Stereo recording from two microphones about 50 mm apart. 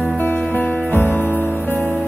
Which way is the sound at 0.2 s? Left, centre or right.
Left.